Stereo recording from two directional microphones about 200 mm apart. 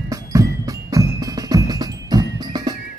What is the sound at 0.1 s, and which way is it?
Percussion, 15° right (ahead or behind).